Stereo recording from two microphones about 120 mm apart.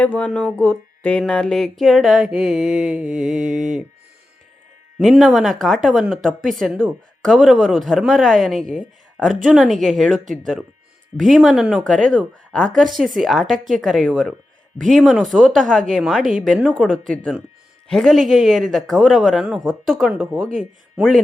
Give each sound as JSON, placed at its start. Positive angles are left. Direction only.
{"t": 0.0, "sound": "speech", "side_deg": 15}
{"t": 1.3, "sound": "mantra", "side_deg": 5}
{"t": 4.9, "sound": "mantra", "side_deg": 0}
{"t": 12.1, "sound": "mantra", "side_deg": 5}
{"t": 16.7, "sound": "speech", "side_deg": 5}
{"t": 17.8, "sound": "mantra", "side_deg": 5}